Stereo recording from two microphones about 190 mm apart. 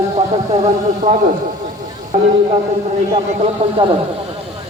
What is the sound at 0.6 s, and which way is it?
Speech, 40° right (ahead or behind).